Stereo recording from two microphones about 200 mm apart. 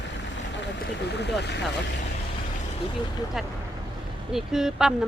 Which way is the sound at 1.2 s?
60° left (ahead or behind).